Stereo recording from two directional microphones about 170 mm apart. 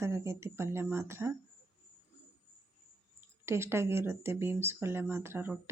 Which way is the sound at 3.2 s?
15° right (ahead or behind).